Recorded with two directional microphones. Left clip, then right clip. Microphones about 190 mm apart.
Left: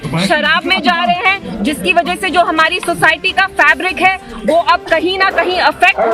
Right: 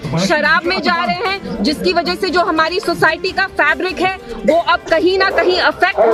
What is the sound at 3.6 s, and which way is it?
A woman's voice, 40° right (ahead or behind).